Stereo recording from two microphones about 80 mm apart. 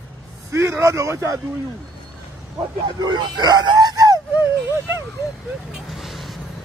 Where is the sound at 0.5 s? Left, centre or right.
Right.